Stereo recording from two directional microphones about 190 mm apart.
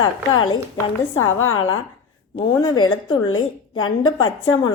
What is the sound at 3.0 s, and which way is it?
Speech, 25° left (ahead or behind).